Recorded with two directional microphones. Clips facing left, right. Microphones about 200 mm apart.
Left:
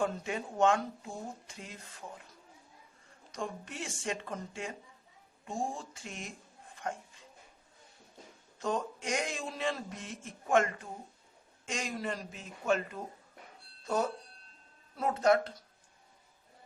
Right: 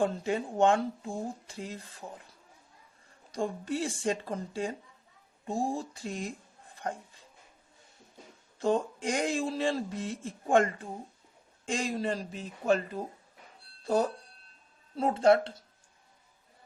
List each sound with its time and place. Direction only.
0.0 s speech: 30° right (ahead or behind)
3.3 s speech: 35° right (ahead or behind)
8.5 s speech: 30° right (ahead or behind)